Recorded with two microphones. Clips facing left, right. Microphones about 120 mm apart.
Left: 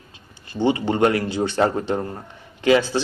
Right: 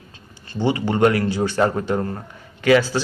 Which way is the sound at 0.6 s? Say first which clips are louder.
Right 1 dB; 20° left (ahead or behind).